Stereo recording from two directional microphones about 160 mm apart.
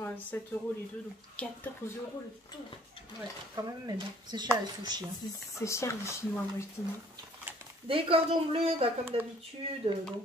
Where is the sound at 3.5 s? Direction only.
25° right (ahead or behind).